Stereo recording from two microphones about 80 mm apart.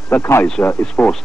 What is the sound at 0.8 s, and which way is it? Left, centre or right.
Speech, centre.